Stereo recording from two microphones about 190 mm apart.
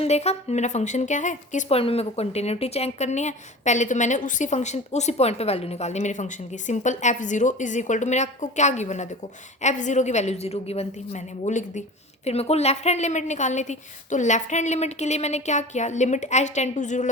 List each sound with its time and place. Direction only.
0.0 s speech: 35° left (ahead or behind)